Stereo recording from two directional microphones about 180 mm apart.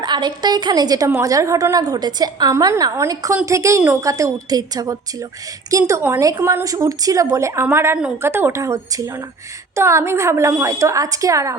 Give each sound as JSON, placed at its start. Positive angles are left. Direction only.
{"t": 0.0, "sound": "a woman's voice", "side_deg": -25}